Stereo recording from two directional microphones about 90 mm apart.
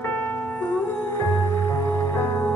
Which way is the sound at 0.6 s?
15° left (ahead or behind).